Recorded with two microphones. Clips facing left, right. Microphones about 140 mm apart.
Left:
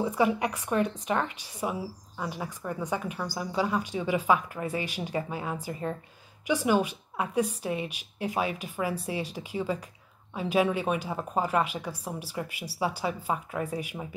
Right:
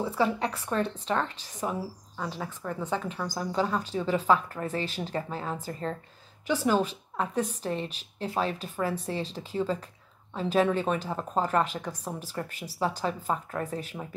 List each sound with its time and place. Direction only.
0.0 s speech: 15° left (ahead or behind)